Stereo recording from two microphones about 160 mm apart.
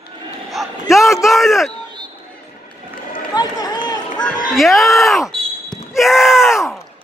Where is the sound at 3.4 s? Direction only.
25° left (ahead or behind).